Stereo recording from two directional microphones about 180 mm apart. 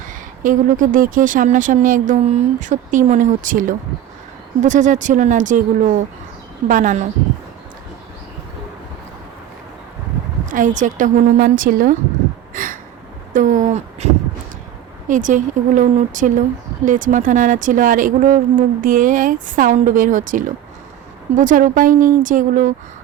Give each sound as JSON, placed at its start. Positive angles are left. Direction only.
{"t": 0.0, "sound": "speech", "side_deg": -45}
{"t": 10.5, "sound": "speech", "side_deg": -45}
{"t": 12.5, "sound": "a sound", "side_deg": -50}
{"t": 13.3, "sound": "speech", "side_deg": -45}